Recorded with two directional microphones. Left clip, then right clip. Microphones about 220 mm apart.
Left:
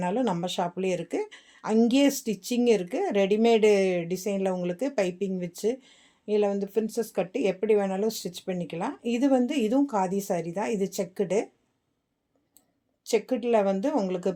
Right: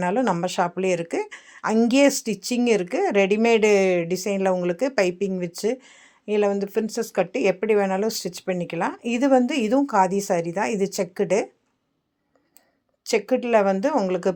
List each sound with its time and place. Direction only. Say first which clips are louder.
0.0 s speech: right 5 dB; 15° right (ahead or behind)
13.1 s speech: right 4 dB; 20° right (ahead or behind)